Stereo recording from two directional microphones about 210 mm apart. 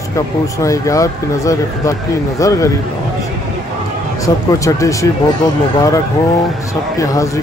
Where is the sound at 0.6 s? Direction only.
15° left (ahead or behind).